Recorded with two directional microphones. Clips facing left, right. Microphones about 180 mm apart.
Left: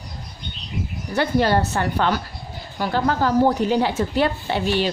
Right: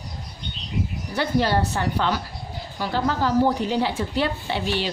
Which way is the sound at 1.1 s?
50° left (ahead or behind).